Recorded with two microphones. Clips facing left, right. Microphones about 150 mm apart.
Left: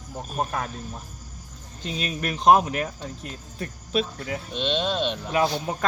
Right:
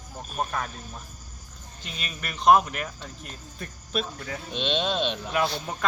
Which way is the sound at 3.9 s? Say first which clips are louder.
Left 4 dB; 20° left (ahead or behind).